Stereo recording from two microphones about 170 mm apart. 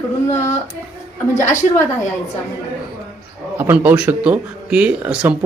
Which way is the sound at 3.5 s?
10° right (ahead or behind).